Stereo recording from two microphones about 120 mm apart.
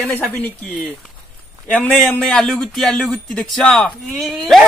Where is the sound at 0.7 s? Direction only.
Centre (ahead or behind).